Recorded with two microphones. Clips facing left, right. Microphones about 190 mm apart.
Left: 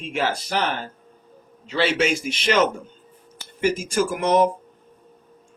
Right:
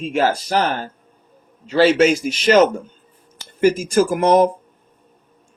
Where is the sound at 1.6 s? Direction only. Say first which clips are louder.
Right 8 dB; 40° right (ahead or behind).